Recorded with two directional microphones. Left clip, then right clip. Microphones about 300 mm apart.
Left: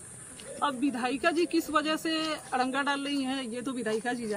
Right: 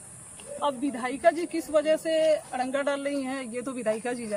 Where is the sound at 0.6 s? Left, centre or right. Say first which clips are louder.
Right 1 dB; centre.